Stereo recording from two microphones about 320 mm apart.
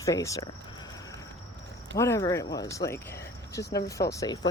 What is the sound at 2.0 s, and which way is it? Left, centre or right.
Speech, centre.